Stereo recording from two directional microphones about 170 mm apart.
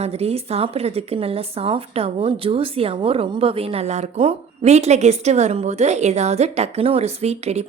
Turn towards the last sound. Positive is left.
turn(degrees=-40)  # may be behind; listen again after turning